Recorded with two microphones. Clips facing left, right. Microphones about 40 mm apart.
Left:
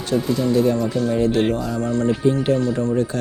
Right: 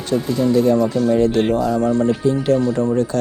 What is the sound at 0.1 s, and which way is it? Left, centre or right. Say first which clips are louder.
Speech: right 2 dB; centre.